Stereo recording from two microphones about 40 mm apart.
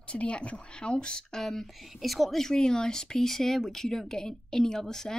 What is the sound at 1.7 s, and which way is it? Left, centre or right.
Speech, centre.